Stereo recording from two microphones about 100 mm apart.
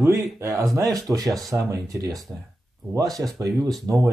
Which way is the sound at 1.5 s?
35° right (ahead or behind).